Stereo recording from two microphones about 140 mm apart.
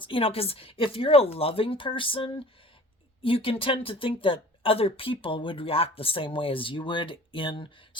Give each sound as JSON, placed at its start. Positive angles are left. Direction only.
{"t": 0.0, "sound": "speech", "side_deg": 40}